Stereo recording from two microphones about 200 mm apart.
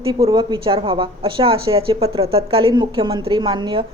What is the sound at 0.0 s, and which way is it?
A woman's voice, 25° right (ahead or behind).